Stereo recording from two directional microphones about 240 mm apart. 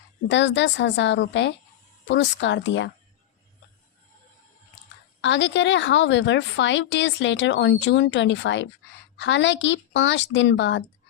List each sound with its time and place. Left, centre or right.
0.3 s a woman's voice: left
5.2 s a woman's voice: left